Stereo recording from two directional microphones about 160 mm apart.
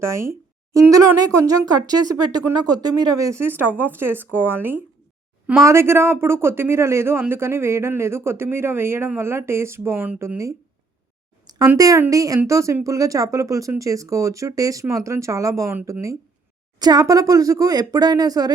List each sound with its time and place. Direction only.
0.0 s a man's voice: 15° right (ahead or behind)
11.8 s speech: 20° right (ahead or behind)